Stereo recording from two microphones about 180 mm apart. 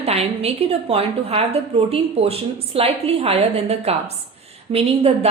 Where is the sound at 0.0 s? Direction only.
35° right (ahead or behind).